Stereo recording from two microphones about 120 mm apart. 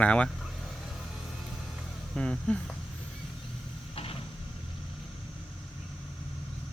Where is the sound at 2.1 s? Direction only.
5° left (ahead or behind).